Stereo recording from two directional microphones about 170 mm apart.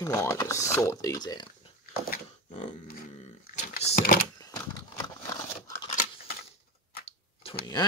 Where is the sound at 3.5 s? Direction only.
55° left (ahead or behind).